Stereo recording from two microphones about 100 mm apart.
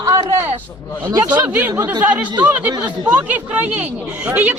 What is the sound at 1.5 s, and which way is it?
Speech, 20° right (ahead or behind).